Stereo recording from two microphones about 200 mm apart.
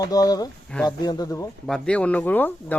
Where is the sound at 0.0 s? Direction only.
20° left (ahead or behind).